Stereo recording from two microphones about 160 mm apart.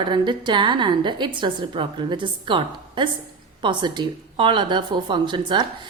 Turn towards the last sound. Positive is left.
turn(degrees=-30)  # may be behind; listen again after turning